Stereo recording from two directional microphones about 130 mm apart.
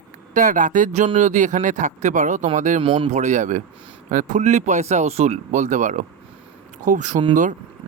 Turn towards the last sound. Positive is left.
turn(degrees=-75)  # may be behind; listen again after turning